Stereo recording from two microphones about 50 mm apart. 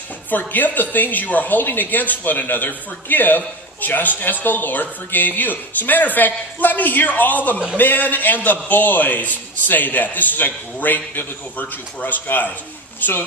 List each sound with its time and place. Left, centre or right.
0.3 s speech: left